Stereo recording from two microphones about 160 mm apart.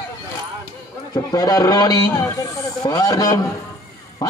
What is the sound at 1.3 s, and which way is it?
A man's voice, 20° left (ahead or behind).